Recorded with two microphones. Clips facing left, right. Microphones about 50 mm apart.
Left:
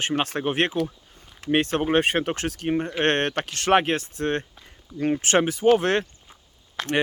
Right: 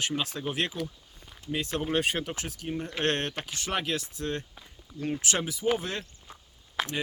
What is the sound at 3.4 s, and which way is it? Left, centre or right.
Speech, left.